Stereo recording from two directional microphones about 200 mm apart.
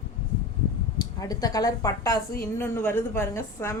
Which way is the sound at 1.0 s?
20° left (ahead or behind).